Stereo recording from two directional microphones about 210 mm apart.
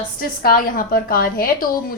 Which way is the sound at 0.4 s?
45° left (ahead or behind).